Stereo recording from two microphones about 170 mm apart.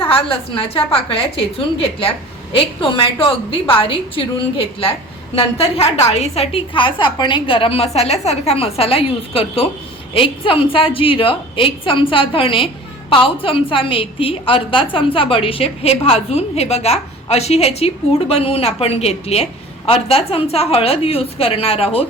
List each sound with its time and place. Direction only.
0.0 s a woman's voice: 30° left (ahead or behind)